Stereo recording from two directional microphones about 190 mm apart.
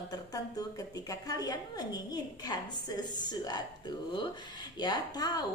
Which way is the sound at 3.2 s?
20° left (ahead or behind).